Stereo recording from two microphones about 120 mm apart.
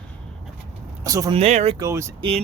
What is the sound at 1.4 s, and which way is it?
Speech, 60° right (ahead or behind).